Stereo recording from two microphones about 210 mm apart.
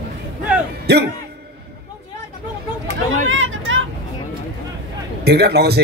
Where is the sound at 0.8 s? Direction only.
50° right (ahead or behind).